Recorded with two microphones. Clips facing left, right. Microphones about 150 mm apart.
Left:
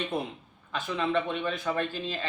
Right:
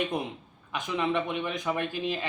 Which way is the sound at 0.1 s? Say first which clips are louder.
Even; 15° right (ahead or behind).